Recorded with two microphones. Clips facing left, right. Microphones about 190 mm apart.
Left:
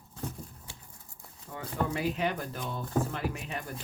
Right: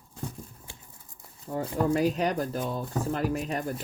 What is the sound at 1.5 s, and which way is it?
Speech, 40° right (ahead or behind).